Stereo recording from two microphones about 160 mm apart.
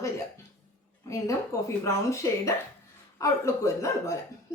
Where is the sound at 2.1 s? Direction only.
20° left (ahead or behind).